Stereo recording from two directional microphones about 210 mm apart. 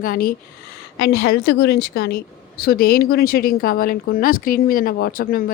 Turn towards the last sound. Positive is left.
turn(degrees=45)  # may be behind; listen again after turning